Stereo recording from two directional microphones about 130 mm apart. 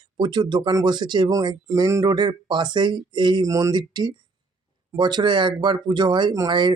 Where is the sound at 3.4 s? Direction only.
25° right (ahead or behind).